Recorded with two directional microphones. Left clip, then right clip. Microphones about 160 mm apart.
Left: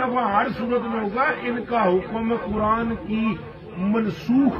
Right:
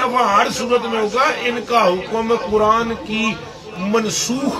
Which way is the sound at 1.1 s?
45° right (ahead or behind).